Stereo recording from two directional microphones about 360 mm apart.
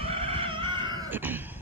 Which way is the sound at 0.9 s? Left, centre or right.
Centre.